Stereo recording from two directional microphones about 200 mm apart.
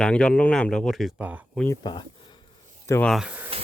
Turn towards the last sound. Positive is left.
turn(degrees=-10)  # may be behind; listen again after turning